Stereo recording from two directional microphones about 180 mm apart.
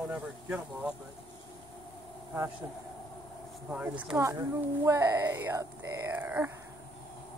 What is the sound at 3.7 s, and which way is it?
Speech, 5° right (ahead or behind).